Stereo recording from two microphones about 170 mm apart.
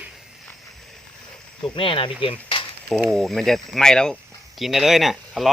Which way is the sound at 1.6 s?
30° left (ahead or behind).